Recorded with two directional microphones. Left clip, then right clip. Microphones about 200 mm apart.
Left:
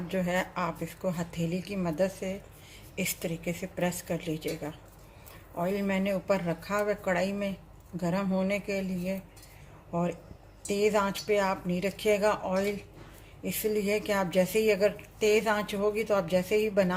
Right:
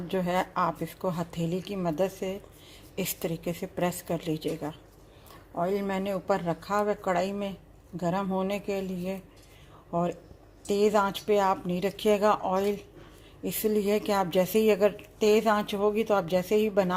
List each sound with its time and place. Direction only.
0.1 s a woman's voice: 30° right (ahead or behind)